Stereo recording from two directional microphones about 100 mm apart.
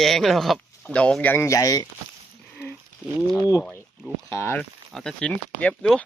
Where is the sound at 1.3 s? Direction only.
30° left (ahead or behind).